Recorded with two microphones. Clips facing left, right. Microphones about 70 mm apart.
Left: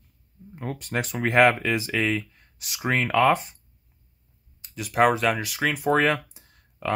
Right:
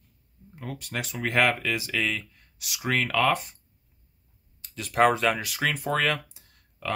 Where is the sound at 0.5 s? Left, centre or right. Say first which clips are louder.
Left 5 dB; left.